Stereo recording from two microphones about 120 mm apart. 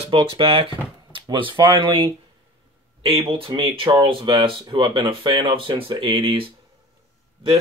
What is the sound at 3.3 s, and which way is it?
Speech, 45° right (ahead or behind).